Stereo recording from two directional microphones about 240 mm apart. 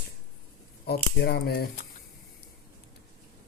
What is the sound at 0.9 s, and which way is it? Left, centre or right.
Speech, left.